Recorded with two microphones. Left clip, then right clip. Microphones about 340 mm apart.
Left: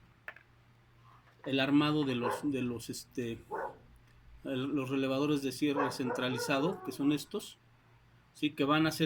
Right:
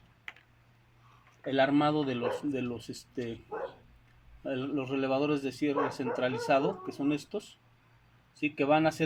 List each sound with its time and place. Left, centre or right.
1.6 s speech: centre
4.4 s speech: centre